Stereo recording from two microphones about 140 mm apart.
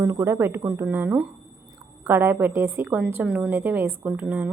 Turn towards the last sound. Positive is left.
turn(degrees=-10)  # may be behind; listen again after turning